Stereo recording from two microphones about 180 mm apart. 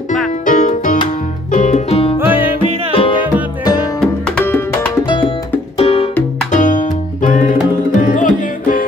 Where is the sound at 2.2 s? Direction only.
10° right (ahead or behind).